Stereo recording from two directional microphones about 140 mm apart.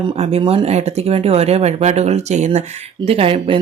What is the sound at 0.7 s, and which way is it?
Speech, 50° right (ahead or behind).